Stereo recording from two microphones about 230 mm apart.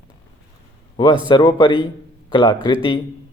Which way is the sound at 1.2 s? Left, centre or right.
Centre.